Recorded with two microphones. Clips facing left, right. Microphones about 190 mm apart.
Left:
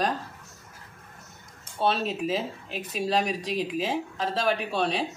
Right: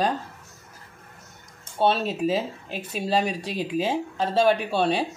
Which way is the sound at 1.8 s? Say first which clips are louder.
Right 4 dB; 30° right (ahead or behind).